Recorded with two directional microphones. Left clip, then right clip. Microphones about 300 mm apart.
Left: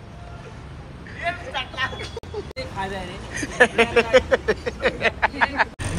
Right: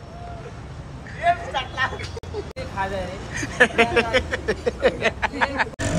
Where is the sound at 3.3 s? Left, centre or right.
Centre.